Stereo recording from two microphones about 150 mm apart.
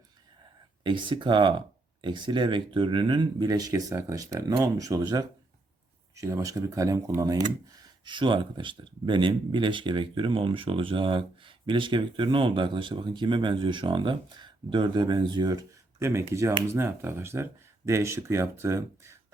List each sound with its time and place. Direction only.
0.9 s speech: 35° right (ahead or behind); by 19.2 s 20° right (ahead or behind)